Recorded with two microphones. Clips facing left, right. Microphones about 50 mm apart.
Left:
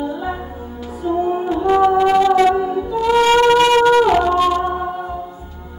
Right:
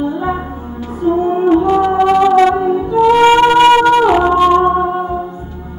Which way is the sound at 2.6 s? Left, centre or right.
Right.